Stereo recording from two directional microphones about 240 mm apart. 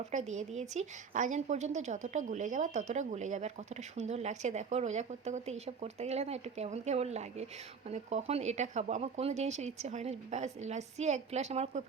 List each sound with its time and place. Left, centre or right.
0.1 s a woman's voice: right